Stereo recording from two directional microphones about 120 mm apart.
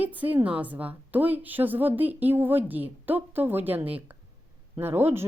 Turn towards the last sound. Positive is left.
turn(degrees=-20)  # may be behind; listen again after turning